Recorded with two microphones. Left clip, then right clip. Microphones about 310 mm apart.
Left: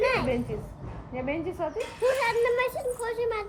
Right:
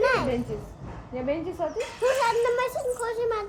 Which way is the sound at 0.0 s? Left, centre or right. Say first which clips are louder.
Right 2 dB; centre.